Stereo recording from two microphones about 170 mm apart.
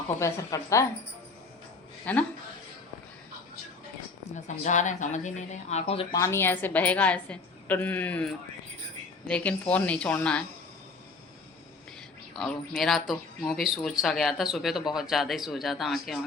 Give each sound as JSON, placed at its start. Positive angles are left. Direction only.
{"t": 0.2, "sound": "a woman's voice", "side_deg": 15}
{"t": 2.1, "sound": "a woman's voice", "side_deg": 10}
{"t": 4.4, "sound": "speech", "side_deg": 45}
{"t": 6.1, "sound": "a woman's voice", "side_deg": 15}
{"t": 12.3, "sound": "speech", "side_deg": 0}